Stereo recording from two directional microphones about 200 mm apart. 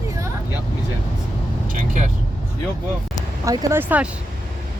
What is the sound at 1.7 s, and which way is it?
Speech, 40° right (ahead or behind).